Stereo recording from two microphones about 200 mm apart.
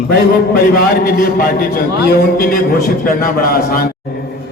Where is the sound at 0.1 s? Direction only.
50° left (ahead or behind).